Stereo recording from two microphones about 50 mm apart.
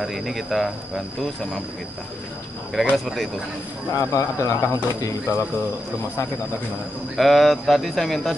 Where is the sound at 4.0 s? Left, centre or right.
Left.